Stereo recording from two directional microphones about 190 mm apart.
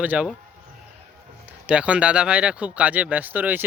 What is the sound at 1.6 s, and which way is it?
Speech, 5° right (ahead or behind).